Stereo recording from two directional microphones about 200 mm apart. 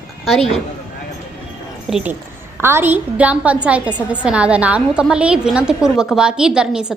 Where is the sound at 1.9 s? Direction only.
Centre (ahead or behind).